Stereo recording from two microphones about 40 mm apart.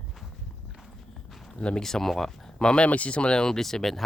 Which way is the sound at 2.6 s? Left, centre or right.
Left.